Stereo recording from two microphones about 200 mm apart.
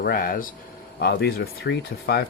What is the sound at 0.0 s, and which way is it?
Speech, 45° left (ahead or behind).